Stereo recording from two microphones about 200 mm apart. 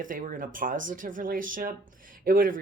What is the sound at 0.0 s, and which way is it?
Speech, 40° right (ahead or behind).